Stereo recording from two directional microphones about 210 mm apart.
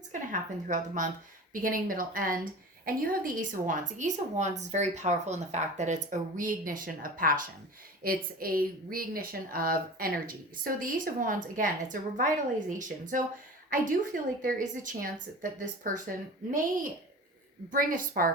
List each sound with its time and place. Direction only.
0.1 s a woman's voice: 35° right (ahead or behind)
17.7 s a woman's voice: 40° right (ahead or behind)